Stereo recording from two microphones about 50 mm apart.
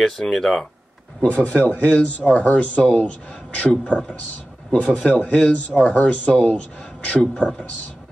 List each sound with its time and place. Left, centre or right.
0.0 s speech: centre
1.2 s speech: left